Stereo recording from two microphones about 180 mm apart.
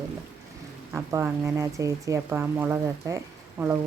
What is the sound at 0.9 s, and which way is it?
Speech, 10° right (ahead or behind).